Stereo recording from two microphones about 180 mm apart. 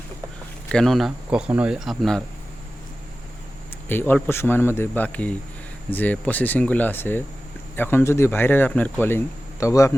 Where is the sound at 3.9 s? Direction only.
10° left (ahead or behind).